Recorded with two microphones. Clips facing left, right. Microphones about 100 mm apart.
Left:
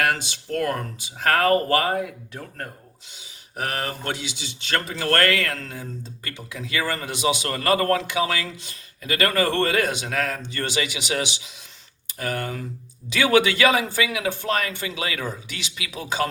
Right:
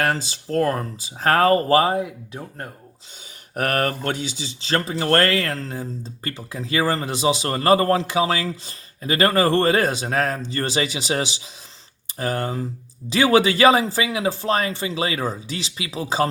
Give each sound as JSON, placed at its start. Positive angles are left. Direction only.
{"t": 0.0, "sound": "speech", "side_deg": -35}
{"t": 3.5, "sound": "speech", "side_deg": -55}